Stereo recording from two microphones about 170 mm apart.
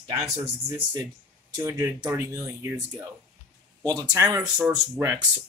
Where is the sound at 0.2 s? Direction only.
10° right (ahead or behind).